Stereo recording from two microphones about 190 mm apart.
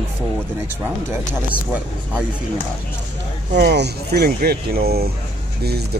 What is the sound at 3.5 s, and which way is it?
Speech, 60° right (ahead or behind).